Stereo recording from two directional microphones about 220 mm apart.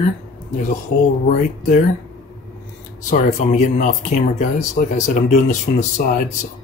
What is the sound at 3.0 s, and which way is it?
Speech, 35° left (ahead or behind).